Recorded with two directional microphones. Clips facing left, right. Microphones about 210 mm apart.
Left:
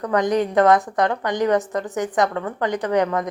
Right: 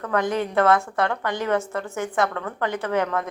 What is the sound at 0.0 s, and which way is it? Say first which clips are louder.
A woman's voice: left 4 dB; 15° left (ahead or behind).